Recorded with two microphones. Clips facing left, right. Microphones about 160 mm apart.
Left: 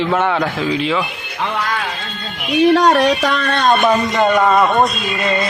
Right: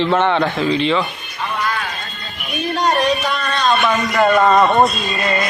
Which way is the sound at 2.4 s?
90° left.